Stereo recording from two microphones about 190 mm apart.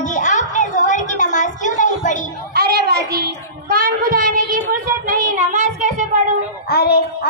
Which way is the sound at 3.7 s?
50° right (ahead or behind).